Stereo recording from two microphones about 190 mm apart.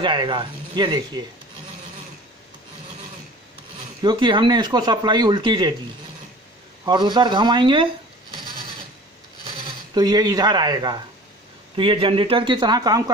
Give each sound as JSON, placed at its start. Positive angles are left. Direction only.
{"t": 0.0, "sound": "speech", "side_deg": -25}
{"t": 4.0, "sound": "speech", "side_deg": -25}
{"t": 6.8, "sound": "speech", "side_deg": -25}
{"t": 9.9, "sound": "speech", "side_deg": -20}